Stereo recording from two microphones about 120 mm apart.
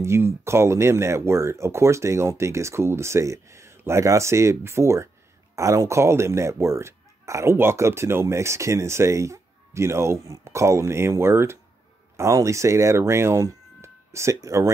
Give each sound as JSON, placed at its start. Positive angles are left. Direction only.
{"t": 0.0, "sound": "speech", "side_deg": -20}